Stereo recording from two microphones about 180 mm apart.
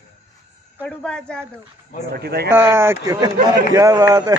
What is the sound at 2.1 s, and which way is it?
Speech, 60° right (ahead or behind).